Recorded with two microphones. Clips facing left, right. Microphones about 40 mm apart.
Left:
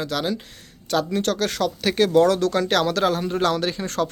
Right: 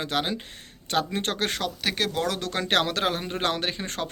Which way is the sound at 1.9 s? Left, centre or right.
Centre.